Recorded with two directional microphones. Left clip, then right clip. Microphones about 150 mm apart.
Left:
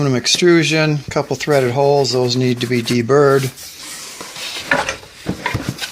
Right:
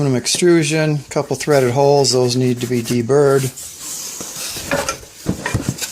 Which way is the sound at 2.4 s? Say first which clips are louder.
Left 1 dB; 5° left (ahead or behind).